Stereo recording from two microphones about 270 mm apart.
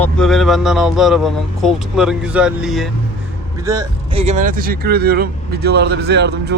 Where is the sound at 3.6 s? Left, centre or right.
Centre; by 6.5 s right.